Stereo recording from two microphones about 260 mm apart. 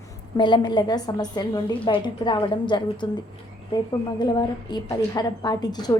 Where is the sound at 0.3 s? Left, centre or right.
Centre.